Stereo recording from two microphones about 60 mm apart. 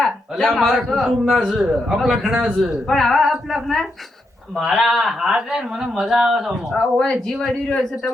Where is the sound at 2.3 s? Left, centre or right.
Centre.